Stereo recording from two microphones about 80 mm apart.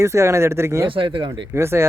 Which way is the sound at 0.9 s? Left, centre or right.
Right.